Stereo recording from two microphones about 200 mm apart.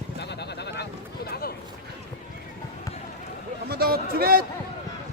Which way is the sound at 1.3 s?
50° left (ahead or behind).